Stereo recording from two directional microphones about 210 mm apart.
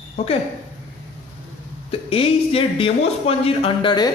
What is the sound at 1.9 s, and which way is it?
Speech, 25° left (ahead or behind).